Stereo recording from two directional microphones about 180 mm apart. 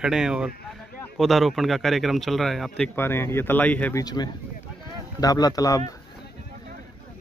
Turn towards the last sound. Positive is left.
turn(degrees=20)  # may be behind; listen again after turning